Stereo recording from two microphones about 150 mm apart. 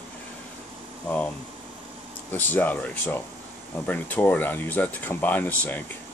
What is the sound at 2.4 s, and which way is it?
Speech, 10° left (ahead or behind).